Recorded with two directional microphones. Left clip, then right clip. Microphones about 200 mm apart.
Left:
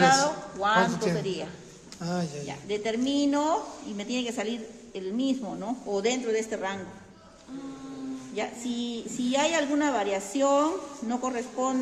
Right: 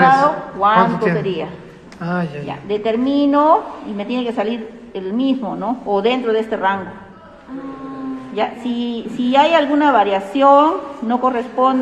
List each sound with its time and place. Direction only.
0.0 s a man's voice: 30° left (ahead or behind)
8.4 s a woman's voice: 25° left (ahead or behind)